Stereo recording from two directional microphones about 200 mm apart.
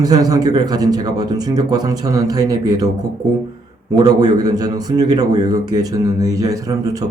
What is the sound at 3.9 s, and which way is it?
Speech, 20° right (ahead or behind).